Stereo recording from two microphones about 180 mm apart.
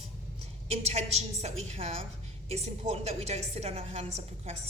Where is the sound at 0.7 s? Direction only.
35° right (ahead or behind).